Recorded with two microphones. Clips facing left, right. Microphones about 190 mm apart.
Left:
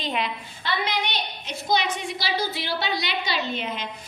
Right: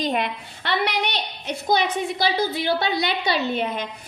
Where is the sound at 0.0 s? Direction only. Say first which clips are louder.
Right 4 dB; 45° right (ahead or behind).